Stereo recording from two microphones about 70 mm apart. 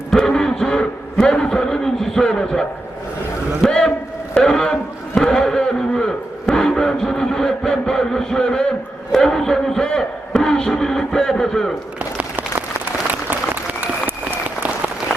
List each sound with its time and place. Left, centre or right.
0.1 s a man's voice: centre
4.4 s a sound: centre
9.1 s a man's voice: centre
13.8 s applause: right